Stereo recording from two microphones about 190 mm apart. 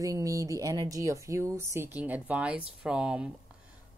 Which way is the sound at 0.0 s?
15° right (ahead or behind).